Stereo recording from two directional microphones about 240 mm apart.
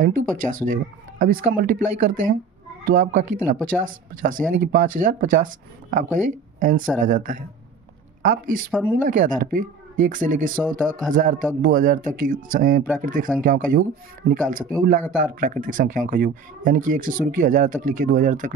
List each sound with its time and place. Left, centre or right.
0.0 s speech: right